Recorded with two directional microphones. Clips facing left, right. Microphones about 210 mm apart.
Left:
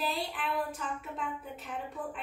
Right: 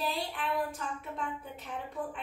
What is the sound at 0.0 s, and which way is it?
A woman's voice, centre (ahead or behind).